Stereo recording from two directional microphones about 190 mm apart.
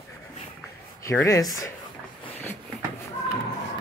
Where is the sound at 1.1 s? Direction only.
15° left (ahead or behind).